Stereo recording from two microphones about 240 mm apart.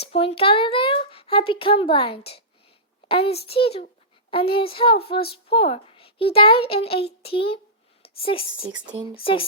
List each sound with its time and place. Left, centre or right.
0.1 s a woman's voice: left